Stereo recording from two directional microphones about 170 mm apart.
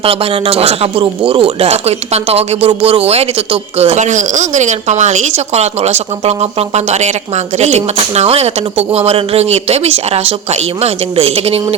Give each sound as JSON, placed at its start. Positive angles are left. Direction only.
{"t": 0.0, "sound": "speech", "side_deg": -35}